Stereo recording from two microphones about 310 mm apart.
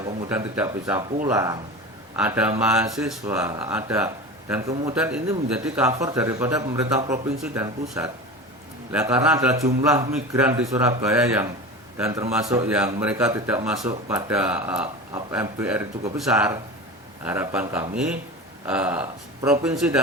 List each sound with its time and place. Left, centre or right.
0.3 s a man's voice: centre
4.7 s a man's voice: centre
4.9 s a man's voice: centre